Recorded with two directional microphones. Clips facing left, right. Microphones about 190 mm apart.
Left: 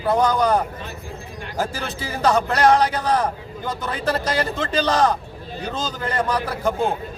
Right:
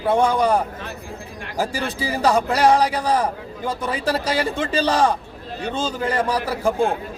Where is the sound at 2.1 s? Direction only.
35° right (ahead or behind).